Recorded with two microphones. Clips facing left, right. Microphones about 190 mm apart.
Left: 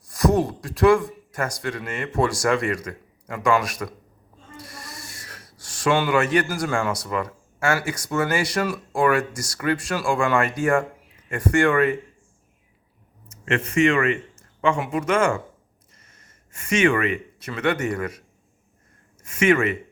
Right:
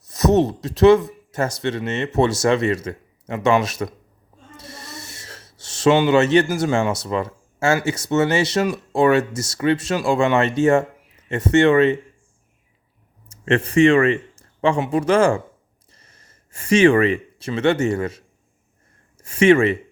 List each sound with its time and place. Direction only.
0.1 s speech: 20° right (ahead or behind)
13.2 s speech: 35° right (ahead or behind)
19.2 s speech: 30° right (ahead or behind)